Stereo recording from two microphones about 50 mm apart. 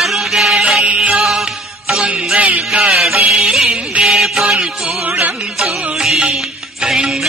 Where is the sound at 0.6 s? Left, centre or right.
Right.